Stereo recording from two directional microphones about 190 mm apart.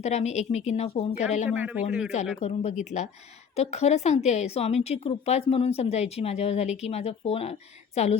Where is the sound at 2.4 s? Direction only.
35° left (ahead or behind).